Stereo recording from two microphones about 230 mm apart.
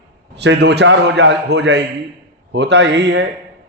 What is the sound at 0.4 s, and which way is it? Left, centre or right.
A man's voice, right.